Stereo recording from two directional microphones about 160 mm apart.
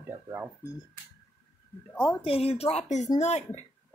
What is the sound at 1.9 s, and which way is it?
Speech, 5° left (ahead or behind).